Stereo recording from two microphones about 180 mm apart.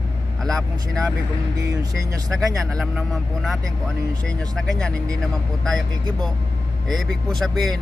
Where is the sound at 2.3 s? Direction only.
Centre (ahead or behind).